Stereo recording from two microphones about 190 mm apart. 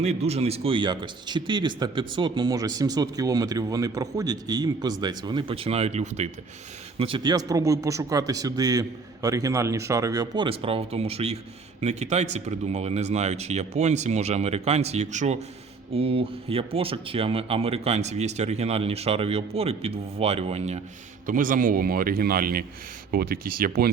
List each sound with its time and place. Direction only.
0.0 s speech: 35° right (ahead or behind)
7.0 s speech: 25° right (ahead or behind)
21.2 s speech: 45° right (ahead or behind)